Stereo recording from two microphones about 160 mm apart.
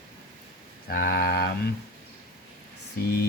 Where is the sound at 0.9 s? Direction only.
70° left (ahead or behind).